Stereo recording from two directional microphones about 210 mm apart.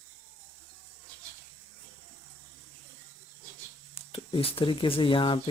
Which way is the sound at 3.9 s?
25° left (ahead or behind).